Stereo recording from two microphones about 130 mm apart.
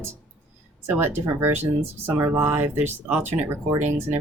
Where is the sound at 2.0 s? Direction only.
15° right (ahead or behind).